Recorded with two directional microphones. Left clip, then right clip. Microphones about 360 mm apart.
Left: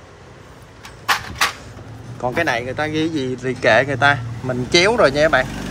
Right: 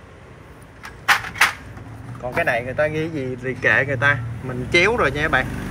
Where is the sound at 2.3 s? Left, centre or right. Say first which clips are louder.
Even; centre.